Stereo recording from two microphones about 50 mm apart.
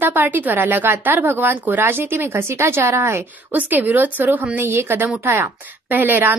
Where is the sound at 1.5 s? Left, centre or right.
Right.